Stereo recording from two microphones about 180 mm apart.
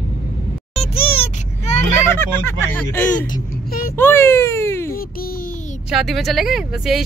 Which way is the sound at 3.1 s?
45° left (ahead or behind).